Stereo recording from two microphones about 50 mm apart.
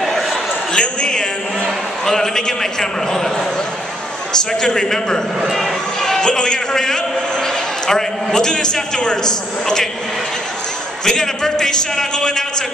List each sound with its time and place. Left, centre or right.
0.7 s a sound: centre
2.0 s a man's voice: centre
4.3 s a man's voice: centre
11.1 s a man's voice: centre